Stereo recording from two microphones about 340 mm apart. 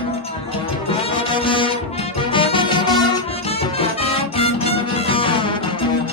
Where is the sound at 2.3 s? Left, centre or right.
Centre.